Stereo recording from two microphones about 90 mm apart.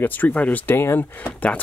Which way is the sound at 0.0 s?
20° left (ahead or behind).